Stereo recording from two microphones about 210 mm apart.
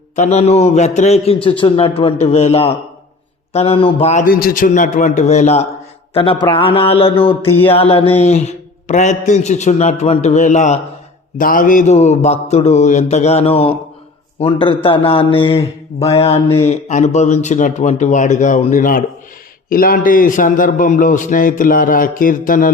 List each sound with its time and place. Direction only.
0.2 s a man's voice: 30° left (ahead or behind)